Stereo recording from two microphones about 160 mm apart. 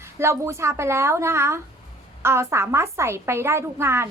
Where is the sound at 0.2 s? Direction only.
15° right (ahead or behind).